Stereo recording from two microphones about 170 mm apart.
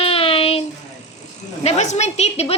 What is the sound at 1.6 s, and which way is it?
Speech, 40° left (ahead or behind).